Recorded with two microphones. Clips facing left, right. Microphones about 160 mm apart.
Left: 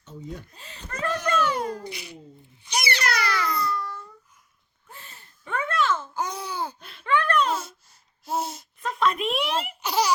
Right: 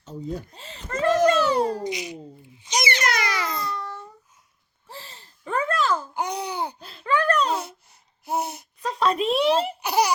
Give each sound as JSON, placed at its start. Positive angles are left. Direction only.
{"t": 0.0, "sound": "speech", "side_deg": -35}
{"t": 1.1, "sound": "a sound", "side_deg": -35}
{"t": 1.8, "sound": "a child's voice", "side_deg": -15}
{"t": 2.6, "sound": "babbling", "side_deg": -20}
{"t": 4.9, "sound": "a sound", "side_deg": -30}
{"t": 6.1, "sound": "babbling", "side_deg": -20}
{"t": 6.7, "sound": "a sound", "side_deg": -35}
{"t": 8.9, "sound": "a child's voice", "side_deg": -35}
{"t": 9.8, "sound": "laughter", "side_deg": -10}